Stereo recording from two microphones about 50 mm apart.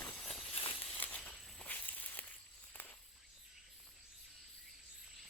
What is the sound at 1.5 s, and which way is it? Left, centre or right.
Walk, left.